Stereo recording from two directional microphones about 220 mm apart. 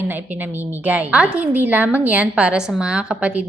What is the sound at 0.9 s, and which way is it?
A woman's voice, 5° right (ahead or behind).